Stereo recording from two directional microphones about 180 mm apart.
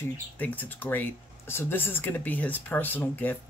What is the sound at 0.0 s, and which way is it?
Speech, 10° left (ahead or behind).